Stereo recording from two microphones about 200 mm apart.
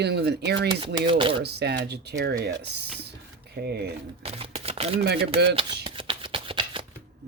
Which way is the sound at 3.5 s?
55° right (ahead or behind).